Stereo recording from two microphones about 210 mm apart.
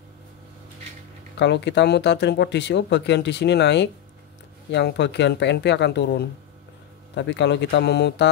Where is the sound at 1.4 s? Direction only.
55° left (ahead or behind).